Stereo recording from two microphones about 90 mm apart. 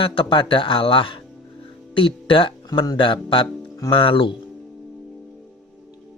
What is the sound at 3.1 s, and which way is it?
Speech, 70° left (ahead or behind).